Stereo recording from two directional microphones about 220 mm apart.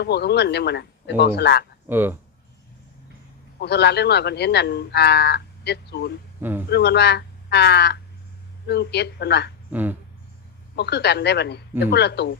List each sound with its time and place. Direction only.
0.0 s speech: 50° left (ahead or behind)
1.9 s speech: 10° right (ahead or behind)
3.6 s speech: 50° left (ahead or behind)
6.4 s speech: 10° right (ahead or behind)
6.7 s speech: 50° left (ahead or behind)
9.7 s speech: 10° right (ahead or behind)
10.8 s speech: 50° left (ahead or behind)